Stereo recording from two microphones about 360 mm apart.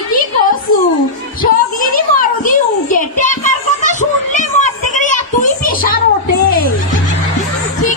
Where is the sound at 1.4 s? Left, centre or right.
Left.